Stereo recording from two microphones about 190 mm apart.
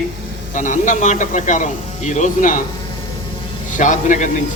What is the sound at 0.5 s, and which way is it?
Speech, 40° left (ahead or behind).